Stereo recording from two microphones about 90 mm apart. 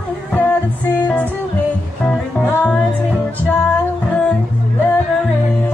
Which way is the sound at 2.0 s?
15° left (ahead or behind).